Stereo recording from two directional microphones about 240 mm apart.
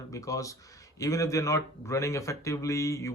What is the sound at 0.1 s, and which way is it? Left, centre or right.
Speech, centre.